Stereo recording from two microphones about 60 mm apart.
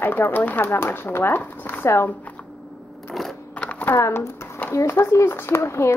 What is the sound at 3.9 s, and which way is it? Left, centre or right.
Speech, left.